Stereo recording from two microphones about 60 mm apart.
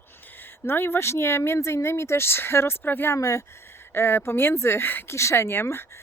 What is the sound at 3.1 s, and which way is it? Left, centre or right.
Speech, left.